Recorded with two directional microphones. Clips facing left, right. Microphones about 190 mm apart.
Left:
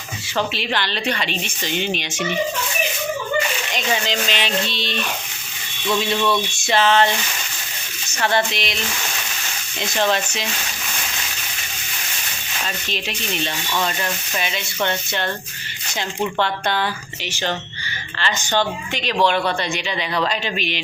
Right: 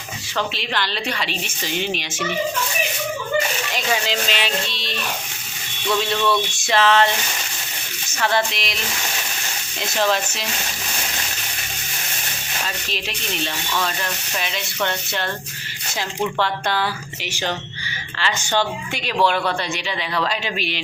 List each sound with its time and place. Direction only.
0.3 s speech: 5° left (ahead or behind)
3.8 s speech: 5° right (ahead or behind)
8.2 s speech: centre (ahead or behind)
12.6 s speech: centre (ahead or behind)
18.2 s speech: 10° right (ahead or behind)